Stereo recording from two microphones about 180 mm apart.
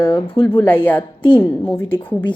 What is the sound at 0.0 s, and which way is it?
Speech, 30° left (ahead or behind).